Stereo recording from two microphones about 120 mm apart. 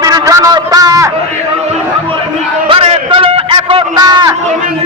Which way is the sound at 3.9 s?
35° right (ahead or behind).